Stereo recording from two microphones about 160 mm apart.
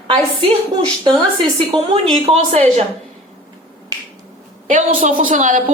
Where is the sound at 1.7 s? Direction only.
35° right (ahead or behind).